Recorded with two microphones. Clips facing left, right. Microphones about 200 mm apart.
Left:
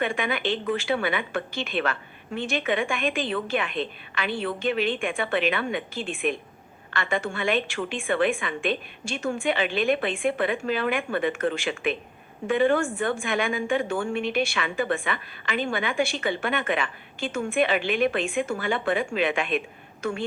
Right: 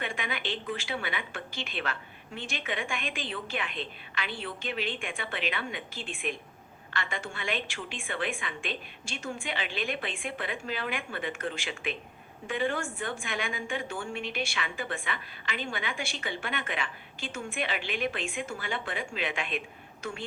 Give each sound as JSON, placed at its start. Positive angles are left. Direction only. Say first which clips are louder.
{"t": 0.0, "sound": "a woman's voice", "louder": "left 9 dB", "side_deg": 60}